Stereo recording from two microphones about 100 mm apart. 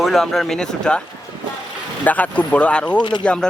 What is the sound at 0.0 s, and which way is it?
Speech, centre (ahead or behind).